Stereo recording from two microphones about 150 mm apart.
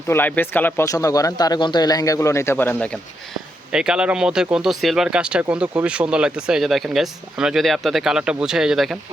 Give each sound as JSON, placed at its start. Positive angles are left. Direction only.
{"t": 0.1, "sound": "speech", "side_deg": 15}
{"t": 3.7, "sound": "speech", "side_deg": -5}